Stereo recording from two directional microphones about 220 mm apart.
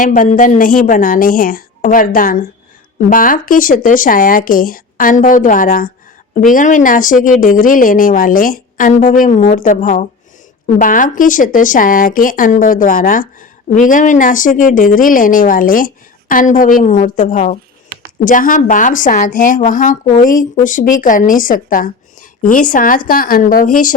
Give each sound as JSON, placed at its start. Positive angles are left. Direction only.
{"t": 0.0, "sound": "speech", "side_deg": 35}